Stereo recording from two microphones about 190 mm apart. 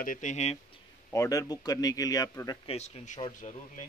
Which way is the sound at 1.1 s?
15° left (ahead or behind).